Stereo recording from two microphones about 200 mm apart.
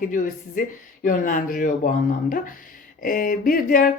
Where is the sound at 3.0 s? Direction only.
45° left (ahead or behind).